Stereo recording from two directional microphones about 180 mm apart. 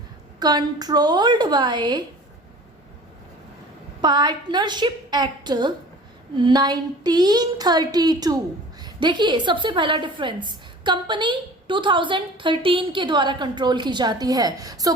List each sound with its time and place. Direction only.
0.3 s a woman's voice: 20° right (ahead or behind)
4.0 s a woman's voice: 25° right (ahead or behind)